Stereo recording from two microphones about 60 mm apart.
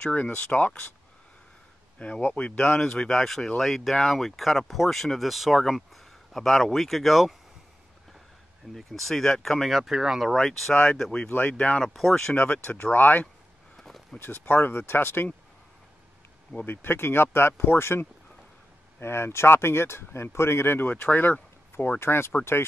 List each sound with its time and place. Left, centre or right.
0.0 s speech: left
2.0 s speech: left; by 7.3 s centre
8.7 s speech: centre
9.8 s speech: centre
10.3 s speech: centre
11.5 s speech: centre
11.8 s speech: centre
12.4 s speech: left
13.7 s a sound: centre
14.1 s speech: left
16.5 s speech: left
22.0 s speech: left